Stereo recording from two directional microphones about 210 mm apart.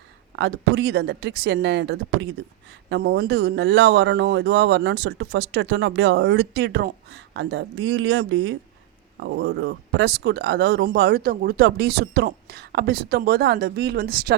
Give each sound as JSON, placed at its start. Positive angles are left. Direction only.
{"t": 0.3, "sound": "a man's voice", "side_deg": -55}